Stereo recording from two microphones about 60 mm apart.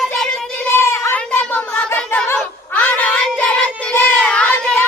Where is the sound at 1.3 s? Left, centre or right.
Left.